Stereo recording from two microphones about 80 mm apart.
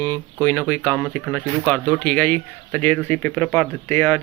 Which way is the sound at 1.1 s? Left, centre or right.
Centre.